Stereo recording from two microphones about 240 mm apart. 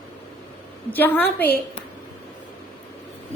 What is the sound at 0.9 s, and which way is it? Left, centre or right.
Speech, centre.